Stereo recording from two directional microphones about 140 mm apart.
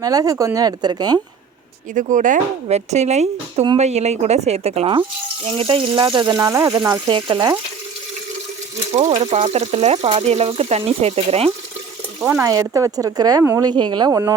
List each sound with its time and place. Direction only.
0.0 s speech: 25° right (ahead or behind)
2.0 s speech: 65° right (ahead or behind); by 6.3 s 35° right (ahead or behind)
6.3 s speech: 20° right (ahead or behind)
7.1 s speech: 35° right (ahead or behind)
8.9 s speech: 50° right (ahead or behind)
12.2 s speech: 15° right (ahead or behind)
13.7 s speech: 30° right (ahead or behind)